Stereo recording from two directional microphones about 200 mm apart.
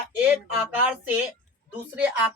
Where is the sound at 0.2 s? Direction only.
5° right (ahead or behind).